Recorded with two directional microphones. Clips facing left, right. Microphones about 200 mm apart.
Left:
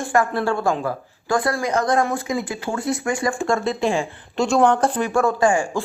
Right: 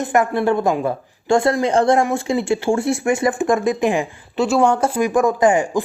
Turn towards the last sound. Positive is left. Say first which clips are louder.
# right 3 dB
turn(degrees=-20)  # may be behind; listen again after turning